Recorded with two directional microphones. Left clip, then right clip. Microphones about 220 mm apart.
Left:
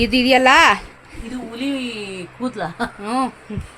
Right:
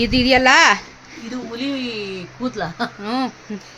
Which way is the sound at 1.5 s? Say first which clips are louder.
Even; centre (ahead or behind).